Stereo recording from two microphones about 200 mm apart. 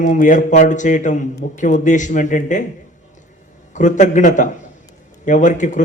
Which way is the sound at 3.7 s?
40° left (ahead or behind).